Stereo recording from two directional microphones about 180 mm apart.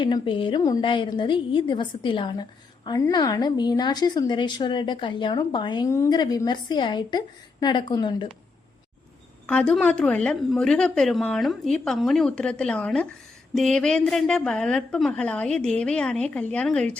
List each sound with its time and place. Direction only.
0.0 s a woman's voice: 30° left (ahead or behind)
9.5 s a woman's voice: 5° left (ahead or behind)